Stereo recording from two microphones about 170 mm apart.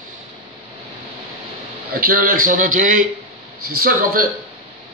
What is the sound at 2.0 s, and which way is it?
A man's voice, 60° right (ahead or behind).